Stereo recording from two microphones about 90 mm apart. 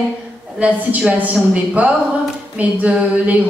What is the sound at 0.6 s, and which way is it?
A woman's voice, 15° right (ahead or behind).